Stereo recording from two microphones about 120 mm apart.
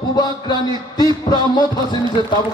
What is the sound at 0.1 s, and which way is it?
A man's voice, 35° left (ahead or behind).